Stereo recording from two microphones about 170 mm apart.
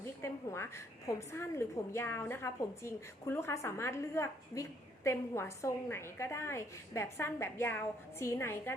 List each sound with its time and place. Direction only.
0.0 s a woman's voice: 15° left (ahead or behind)